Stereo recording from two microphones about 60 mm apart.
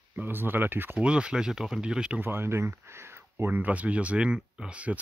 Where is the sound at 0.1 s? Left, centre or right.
Right.